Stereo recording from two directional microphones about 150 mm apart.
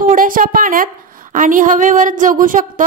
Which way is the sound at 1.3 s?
60° right (ahead or behind).